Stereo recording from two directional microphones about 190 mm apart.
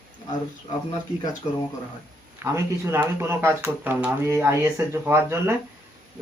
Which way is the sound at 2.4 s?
15° right (ahead or behind).